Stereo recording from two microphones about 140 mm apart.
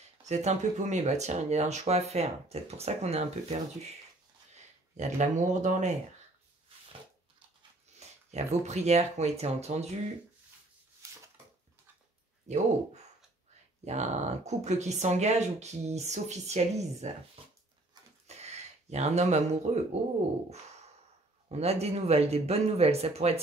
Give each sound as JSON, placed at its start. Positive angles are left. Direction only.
{"t": 0.2, "sound": "speech", "side_deg": -55}
{"t": 4.9, "sound": "speech", "side_deg": -60}
{"t": 8.3, "sound": "speech", "side_deg": -50}
{"t": 12.5, "sound": "speech", "side_deg": -55}
{"t": 13.8, "sound": "speech", "side_deg": -55}
{"t": 18.2, "sound": "a sound", "side_deg": -50}
{"t": 21.5, "sound": "speech", "side_deg": -50}